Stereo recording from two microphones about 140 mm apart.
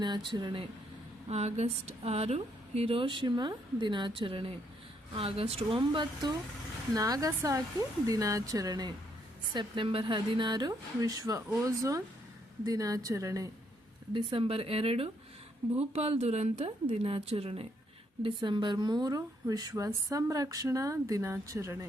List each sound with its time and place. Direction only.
0.3 s speech: 35° right (ahead or behind)
1.3 s speech: 50° right (ahead or behind); by 13.5 s 25° right (ahead or behind)
14.1 s speech: 35° right (ahead or behind)